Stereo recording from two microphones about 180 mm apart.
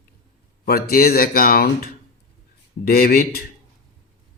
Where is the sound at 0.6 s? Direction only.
55° left (ahead or behind).